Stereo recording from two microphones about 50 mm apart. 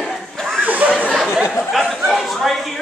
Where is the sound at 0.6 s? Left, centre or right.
Right.